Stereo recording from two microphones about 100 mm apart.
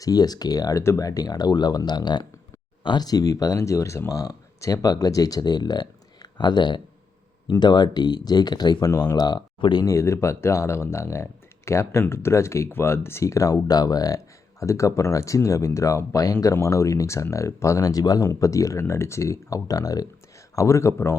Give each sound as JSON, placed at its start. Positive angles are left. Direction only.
{"t": 0.0, "sound": "speech", "side_deg": 40}
{"t": 9.8, "sound": "speech", "side_deg": 30}